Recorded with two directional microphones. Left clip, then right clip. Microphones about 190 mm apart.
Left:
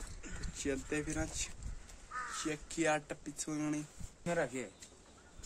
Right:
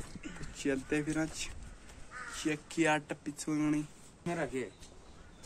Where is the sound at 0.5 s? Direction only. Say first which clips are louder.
Right 4 dB; centre (ahead or behind).